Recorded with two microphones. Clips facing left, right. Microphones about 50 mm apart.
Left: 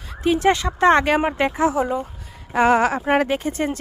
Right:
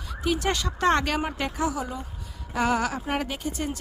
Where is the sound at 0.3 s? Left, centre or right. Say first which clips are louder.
Left 9 dB; left.